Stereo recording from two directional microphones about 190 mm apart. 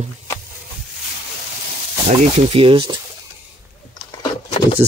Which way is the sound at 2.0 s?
30° right (ahead or behind).